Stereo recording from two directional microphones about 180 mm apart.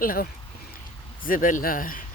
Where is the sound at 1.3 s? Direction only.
50° left (ahead or behind).